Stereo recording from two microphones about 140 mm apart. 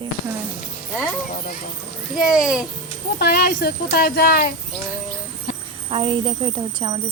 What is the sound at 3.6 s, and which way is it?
Speech, 90° left.